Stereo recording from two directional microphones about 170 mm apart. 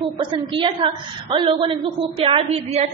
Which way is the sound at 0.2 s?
30° right (ahead or behind).